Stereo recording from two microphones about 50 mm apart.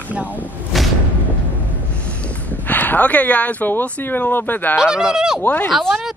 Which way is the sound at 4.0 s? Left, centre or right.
Left.